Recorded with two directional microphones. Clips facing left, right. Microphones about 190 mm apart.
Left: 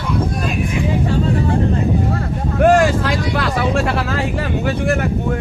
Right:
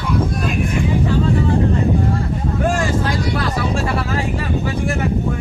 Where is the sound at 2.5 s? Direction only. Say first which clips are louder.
Left 8 dB; 70° left (ahead or behind).